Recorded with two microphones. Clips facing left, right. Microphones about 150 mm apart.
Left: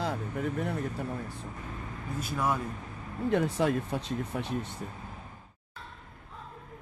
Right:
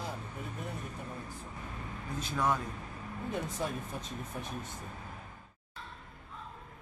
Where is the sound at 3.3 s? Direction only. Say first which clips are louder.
Left 10 dB; 85° left.